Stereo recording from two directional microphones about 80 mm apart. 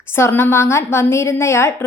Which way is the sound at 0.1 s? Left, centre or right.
Left.